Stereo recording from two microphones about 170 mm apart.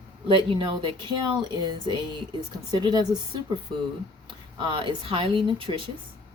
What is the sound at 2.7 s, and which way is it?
Speech, 25° right (ahead or behind).